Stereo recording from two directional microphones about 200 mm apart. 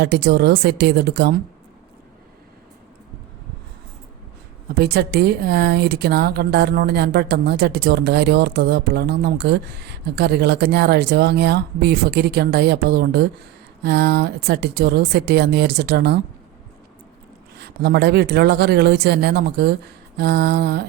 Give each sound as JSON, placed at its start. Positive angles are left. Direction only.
{"t": 0.0, "sound": "speech", "side_deg": -55}
{"t": 4.8, "sound": "speech", "side_deg": -55}
{"t": 17.6, "sound": "speech", "side_deg": -55}